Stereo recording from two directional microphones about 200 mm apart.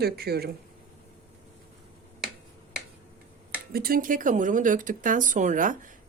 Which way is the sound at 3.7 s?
50° right (ahead or behind).